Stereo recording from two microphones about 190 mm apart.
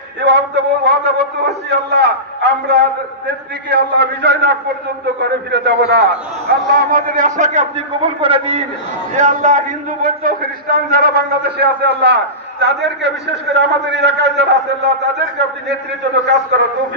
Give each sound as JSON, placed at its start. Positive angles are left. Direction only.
{"t": 0.3, "sound": "a man's voice", "side_deg": -65}
{"t": 6.7, "sound": "a man's voice", "side_deg": -50}
{"t": 9.1, "sound": "a man's voice", "side_deg": -40}
{"t": 16.5, "sound": "a man's voice", "side_deg": -60}